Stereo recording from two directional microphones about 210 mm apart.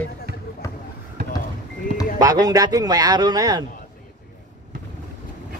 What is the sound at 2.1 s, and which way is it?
Speech, 15° right (ahead or behind).